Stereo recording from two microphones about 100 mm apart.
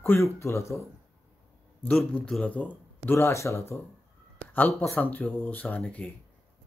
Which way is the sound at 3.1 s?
25° left (ahead or behind).